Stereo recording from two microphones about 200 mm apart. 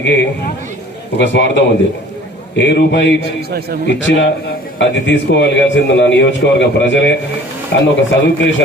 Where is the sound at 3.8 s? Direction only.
65° left (ahead or behind).